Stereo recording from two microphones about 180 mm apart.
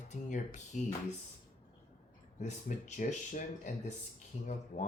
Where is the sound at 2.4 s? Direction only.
40° left (ahead or behind).